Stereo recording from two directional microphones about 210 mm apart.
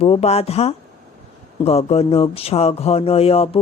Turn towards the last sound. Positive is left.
turn(degrees=30)  # may be behind; listen again after turning